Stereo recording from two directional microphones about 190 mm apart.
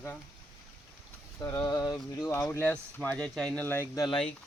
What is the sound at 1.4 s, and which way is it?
Speech, 20° left (ahead or behind).